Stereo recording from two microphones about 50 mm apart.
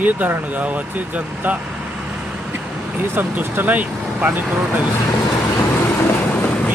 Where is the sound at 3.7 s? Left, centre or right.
Right.